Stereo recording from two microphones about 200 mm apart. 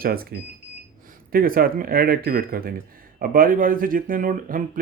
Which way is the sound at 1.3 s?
45° right (ahead or behind).